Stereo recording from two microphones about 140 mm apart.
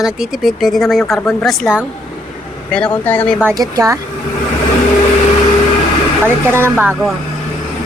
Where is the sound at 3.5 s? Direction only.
25° right (ahead or behind).